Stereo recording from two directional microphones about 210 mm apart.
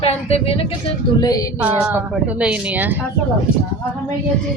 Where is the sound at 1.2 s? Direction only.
15° left (ahead or behind).